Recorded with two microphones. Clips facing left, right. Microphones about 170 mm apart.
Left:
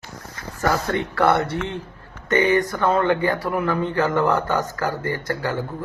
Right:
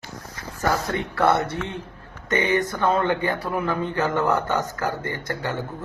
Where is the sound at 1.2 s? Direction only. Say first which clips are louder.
Left 1 dB; 25° right (ahead or behind).